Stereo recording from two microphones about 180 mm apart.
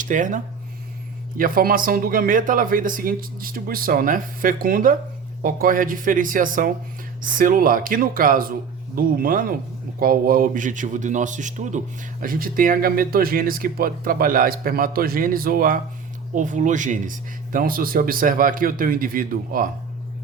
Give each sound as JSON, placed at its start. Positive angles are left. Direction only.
{"t": 0.0, "sound": "speech", "side_deg": -45}